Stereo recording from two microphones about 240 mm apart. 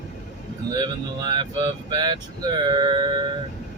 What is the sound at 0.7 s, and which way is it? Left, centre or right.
Speech, centre.